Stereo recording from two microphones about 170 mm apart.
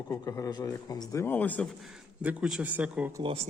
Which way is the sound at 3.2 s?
35° right (ahead or behind).